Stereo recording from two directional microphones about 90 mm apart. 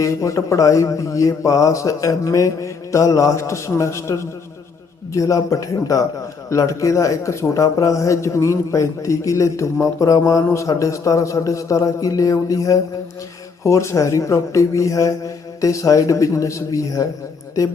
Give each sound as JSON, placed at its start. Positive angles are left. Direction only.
{"t": 0.0, "sound": "a man's voice", "side_deg": 35}